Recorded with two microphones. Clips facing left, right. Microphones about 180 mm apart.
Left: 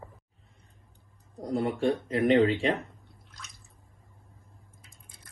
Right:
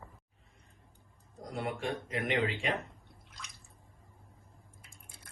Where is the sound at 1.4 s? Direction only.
35° left (ahead or behind).